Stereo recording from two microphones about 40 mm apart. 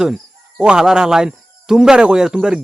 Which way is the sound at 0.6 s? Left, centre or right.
Right.